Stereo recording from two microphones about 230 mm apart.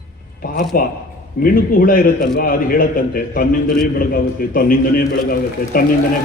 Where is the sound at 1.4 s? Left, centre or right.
Left.